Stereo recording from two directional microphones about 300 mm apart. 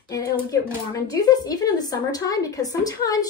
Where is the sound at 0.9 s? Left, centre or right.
Centre.